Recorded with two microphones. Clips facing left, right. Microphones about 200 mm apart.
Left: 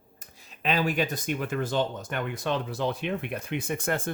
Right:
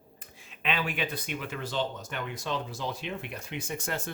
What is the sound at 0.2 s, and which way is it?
Speech, 40° left (ahead or behind).